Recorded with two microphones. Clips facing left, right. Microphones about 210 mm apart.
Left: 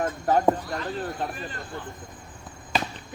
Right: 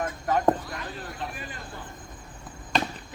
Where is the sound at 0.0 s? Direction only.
30° left (ahead or behind).